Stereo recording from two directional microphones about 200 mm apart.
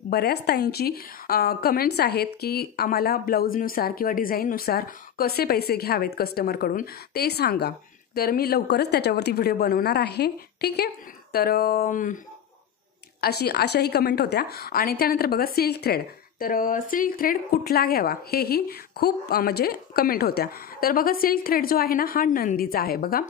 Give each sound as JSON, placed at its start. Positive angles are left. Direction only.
{"t": 0.1, "sound": "a woman's voice", "side_deg": 50}
{"t": 13.2, "sound": "a woman's voice", "side_deg": 55}